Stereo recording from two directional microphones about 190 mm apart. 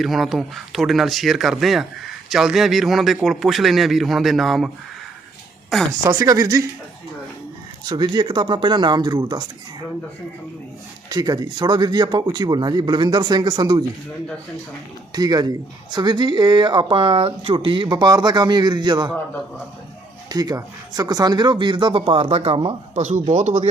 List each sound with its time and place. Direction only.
0.0 s a man's voice: centre (ahead or behind)
5.9 s speech: 20° right (ahead or behind)
7.9 s speech: 20° right (ahead or behind)
11.1 s speech: 20° right (ahead or behind)
15.1 s speech: 20° right (ahead or behind)
20.3 s speech: 20° right (ahead or behind); by 23.6 s 40° right (ahead or behind)